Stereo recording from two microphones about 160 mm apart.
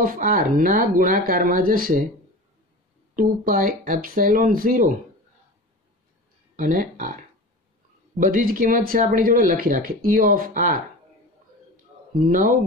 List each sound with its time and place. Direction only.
0.0 s speech: 60° right (ahead or behind)
3.2 s speech: 55° right (ahead or behind)
6.5 s speech: 60° right (ahead or behind)
8.2 s speech: 60° right (ahead or behind)
12.3 s speech: 55° right (ahead or behind)